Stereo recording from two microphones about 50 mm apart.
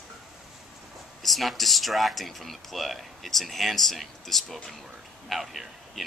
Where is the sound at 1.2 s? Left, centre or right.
Centre.